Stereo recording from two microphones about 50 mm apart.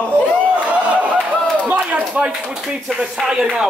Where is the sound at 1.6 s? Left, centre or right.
Right.